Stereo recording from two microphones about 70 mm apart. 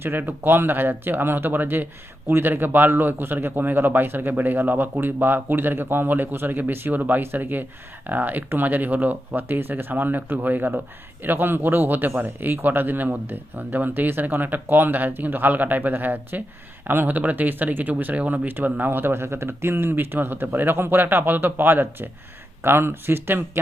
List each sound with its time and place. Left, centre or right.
0.0 s speech: right